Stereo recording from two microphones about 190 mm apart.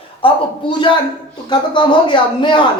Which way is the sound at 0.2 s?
30° left (ahead or behind).